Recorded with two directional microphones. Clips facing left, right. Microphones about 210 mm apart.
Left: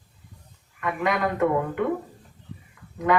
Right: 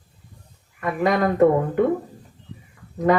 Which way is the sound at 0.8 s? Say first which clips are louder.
Right 5 dB; 35° right (ahead or behind).